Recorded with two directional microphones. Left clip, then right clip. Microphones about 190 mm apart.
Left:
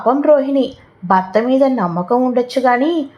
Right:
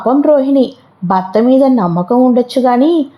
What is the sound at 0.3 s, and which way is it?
A woman's voice, 30° right (ahead or behind).